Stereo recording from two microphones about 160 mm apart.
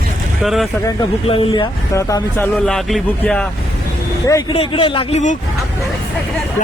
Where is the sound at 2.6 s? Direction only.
5° left (ahead or behind).